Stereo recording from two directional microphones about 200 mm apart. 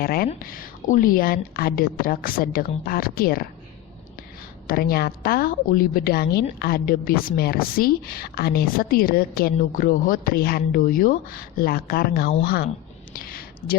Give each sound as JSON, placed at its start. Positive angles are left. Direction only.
{"t": 0.0, "sound": "a woman's voice", "side_deg": 50}
{"t": 4.6, "sound": "a woman's voice", "side_deg": 45}
{"t": 13.1, "sound": "a sound", "side_deg": 50}